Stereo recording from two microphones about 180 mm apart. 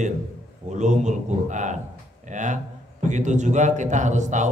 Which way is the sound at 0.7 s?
40° right (ahead or behind).